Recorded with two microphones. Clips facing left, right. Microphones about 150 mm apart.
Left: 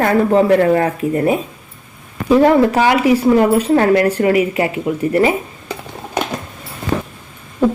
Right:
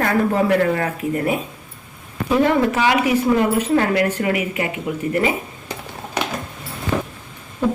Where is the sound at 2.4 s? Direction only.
35° left (ahead or behind).